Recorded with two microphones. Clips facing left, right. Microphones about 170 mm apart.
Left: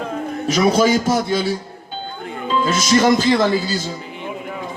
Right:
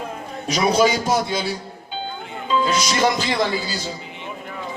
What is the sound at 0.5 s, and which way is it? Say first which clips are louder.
A man's voice: left 2 dB; 45° left (ahead or behind).